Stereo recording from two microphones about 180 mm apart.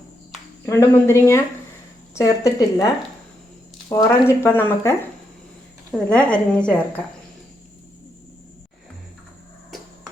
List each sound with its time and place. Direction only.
0.6 s a woman's voice: 15° left (ahead or behind)
4.3 s a woman's voice: 10° left (ahead or behind)